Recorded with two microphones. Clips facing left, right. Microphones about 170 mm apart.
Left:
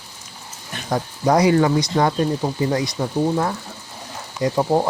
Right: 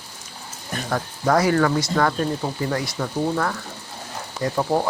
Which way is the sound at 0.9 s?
20° left (ahead or behind).